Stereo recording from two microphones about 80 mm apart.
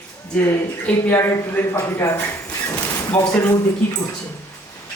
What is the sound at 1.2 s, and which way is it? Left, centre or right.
Speech, left.